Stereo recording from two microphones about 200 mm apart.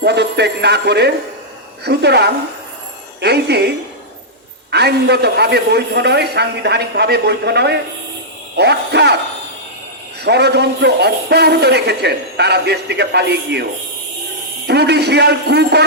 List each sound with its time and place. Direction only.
0.0 s a man's voice: 55° right (ahead or behind)
4.7 s a man's voice: 55° right (ahead or behind)
10.2 s a man's voice: 55° right (ahead or behind)
14.7 s a man's voice: 55° right (ahead or behind)